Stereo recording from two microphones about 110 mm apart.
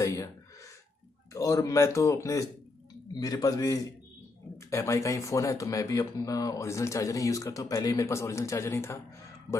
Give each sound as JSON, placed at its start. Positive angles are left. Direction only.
{"t": 0.0, "sound": "gasp", "side_deg": 30}
{"t": 1.3, "sound": "a man's voice", "side_deg": 30}